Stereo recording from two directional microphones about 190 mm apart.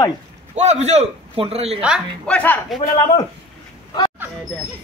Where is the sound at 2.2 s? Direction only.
10° left (ahead or behind).